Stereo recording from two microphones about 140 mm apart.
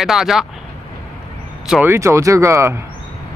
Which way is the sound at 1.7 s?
15° right (ahead or behind).